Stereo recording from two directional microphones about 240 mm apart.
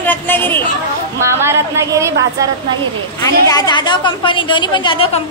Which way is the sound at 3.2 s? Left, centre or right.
Centre.